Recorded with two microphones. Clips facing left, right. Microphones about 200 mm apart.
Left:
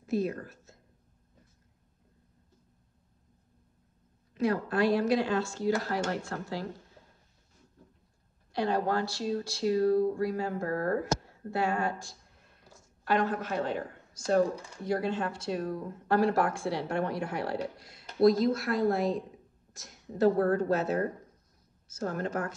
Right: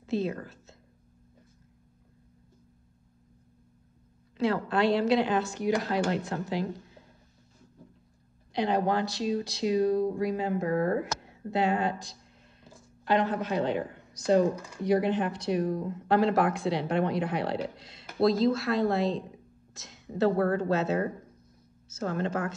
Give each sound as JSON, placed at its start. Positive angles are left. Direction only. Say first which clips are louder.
{"t": 0.0, "sound": "a sound", "louder": "even", "side_deg": -25}
{"t": 4.4, "sound": "speech", "louder": "right 1 dB", "side_deg": -25}
{"t": 8.5, "sound": "a woman's voice", "louder": "right 2 dB", "side_deg": -20}